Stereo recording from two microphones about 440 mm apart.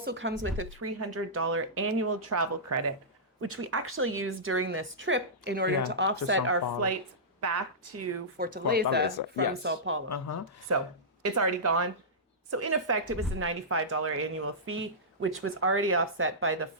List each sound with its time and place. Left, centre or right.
0.0 s a woman's voice: right
8.4 s a woman's voice: centre
10.1 s speech: left
11.2 s a woman's voice: right